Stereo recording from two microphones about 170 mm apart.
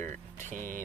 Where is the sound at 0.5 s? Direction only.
50° right (ahead or behind).